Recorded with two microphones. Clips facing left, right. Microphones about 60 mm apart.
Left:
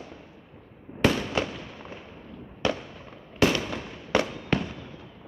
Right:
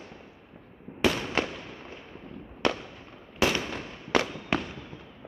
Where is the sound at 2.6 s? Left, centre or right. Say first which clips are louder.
Even; right.